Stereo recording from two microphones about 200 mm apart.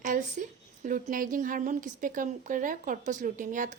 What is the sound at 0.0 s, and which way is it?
A woman's voice, 40° right (ahead or behind).